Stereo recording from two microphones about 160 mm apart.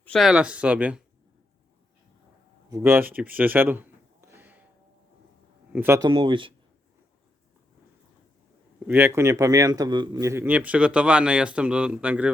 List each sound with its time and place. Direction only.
0.0 s a man's voice: 5° left (ahead or behind)
2.6 s a sound: 20° right (ahead or behind)
5.7 s a man's voice: 10° right (ahead or behind)
6.0 s speech: 30° right (ahead or behind)
8.9 s a man's voice: 15° right (ahead or behind)